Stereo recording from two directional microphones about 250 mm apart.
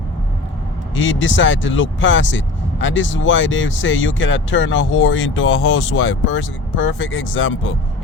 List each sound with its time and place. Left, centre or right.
0.9 s speech: left